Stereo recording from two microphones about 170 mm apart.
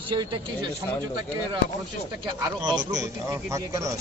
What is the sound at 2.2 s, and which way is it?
A man's voice, 25° right (ahead or behind).